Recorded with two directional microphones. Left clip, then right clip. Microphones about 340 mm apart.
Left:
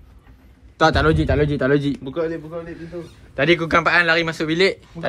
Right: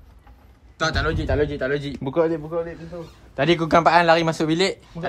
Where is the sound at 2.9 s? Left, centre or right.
Centre.